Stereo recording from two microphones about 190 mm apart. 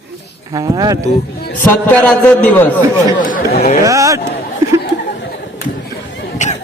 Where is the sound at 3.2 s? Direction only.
45° left (ahead or behind).